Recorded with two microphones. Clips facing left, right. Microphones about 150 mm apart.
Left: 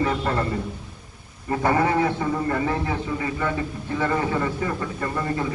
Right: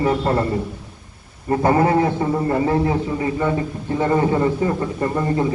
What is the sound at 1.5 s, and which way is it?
A man's voice, 30° right (ahead or behind).